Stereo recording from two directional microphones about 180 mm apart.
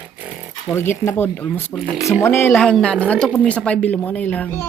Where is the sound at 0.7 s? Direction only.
15° left (ahead or behind).